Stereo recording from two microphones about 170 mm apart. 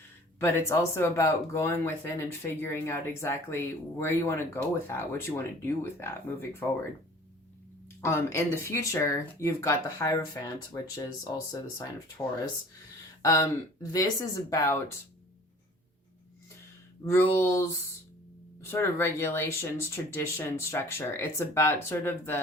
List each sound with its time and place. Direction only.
0.3 s speech: 15° left (ahead or behind)
8.0 s speech: 15° left (ahead or behind)
13.2 s speech: 20° left (ahead or behind)
17.1 s speech: 15° left (ahead or behind)